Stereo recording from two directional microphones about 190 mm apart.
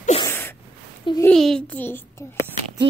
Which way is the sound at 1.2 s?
5° left (ahead or behind).